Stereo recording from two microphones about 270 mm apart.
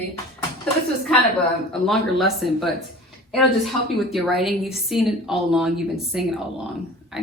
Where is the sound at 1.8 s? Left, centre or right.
Centre.